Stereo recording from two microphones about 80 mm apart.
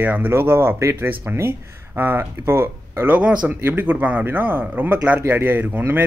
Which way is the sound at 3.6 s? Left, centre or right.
Right.